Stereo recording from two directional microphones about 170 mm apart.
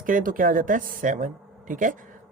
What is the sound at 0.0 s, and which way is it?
Speech, 55° right (ahead or behind).